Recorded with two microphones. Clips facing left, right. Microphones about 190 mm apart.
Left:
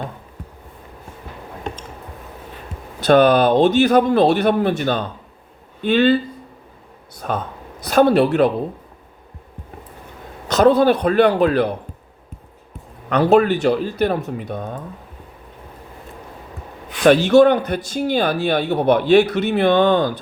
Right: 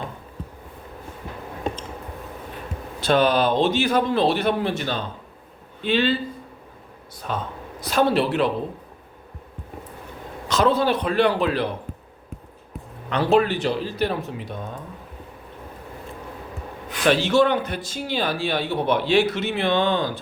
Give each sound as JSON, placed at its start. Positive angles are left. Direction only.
{"t": 3.1, "sound": "speech", "side_deg": 55}
{"t": 7.2, "sound": "speech", "side_deg": 50}
{"t": 10.5, "sound": "a man's voice", "side_deg": 40}
{"t": 13.1, "sound": "speech", "side_deg": 45}
{"t": 17.1, "sound": "speech", "side_deg": 45}
{"t": 19.5, "sound": "speech", "side_deg": 45}